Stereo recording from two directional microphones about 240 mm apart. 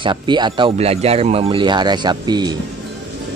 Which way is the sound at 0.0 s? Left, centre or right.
Centre.